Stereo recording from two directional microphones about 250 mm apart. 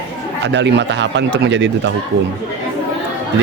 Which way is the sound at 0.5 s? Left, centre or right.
Right.